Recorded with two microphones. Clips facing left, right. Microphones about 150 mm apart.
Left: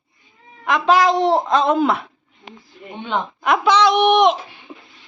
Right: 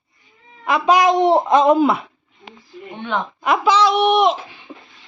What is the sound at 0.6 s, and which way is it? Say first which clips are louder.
Speech: right 1 dB; 10° right (ahead or behind).